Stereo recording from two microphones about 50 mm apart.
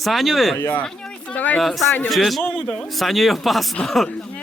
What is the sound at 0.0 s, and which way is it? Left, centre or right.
Speech, centre.